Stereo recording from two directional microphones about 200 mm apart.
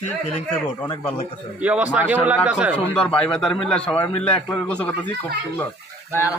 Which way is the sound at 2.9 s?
5° left (ahead or behind).